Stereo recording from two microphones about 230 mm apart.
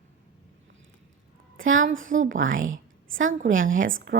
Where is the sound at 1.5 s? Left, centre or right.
Right.